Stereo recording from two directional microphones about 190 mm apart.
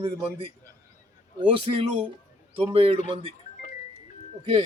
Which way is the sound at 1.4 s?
30° right (ahead or behind).